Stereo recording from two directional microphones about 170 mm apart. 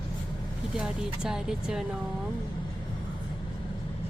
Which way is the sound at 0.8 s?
5° right (ahead or behind).